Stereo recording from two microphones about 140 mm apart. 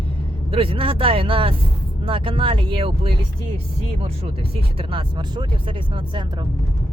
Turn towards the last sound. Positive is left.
turn(degrees=-35)  # may be behind; listen again after turning